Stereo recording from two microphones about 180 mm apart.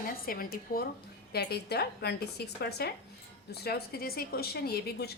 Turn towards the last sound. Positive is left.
turn(degrees=60)  # may be behind; listen again after turning